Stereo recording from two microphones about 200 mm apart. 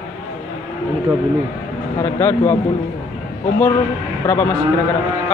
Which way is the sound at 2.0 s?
10° left (ahead or behind).